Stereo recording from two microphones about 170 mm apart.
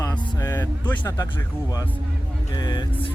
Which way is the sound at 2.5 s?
25° left (ahead or behind).